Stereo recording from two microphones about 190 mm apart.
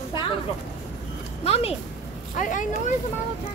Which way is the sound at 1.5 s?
30° left (ahead or behind).